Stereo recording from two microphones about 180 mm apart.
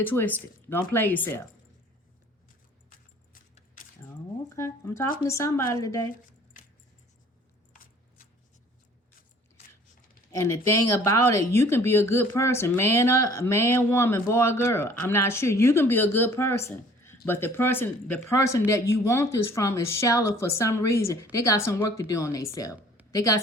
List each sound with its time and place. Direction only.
0.0 s speech: 10° left (ahead or behind)
3.3 s keys jangling: 50° left (ahead or behind)
4.4 s speech: 15° left (ahead or behind)
10.3 s a woman's voice: 15° left (ahead or behind)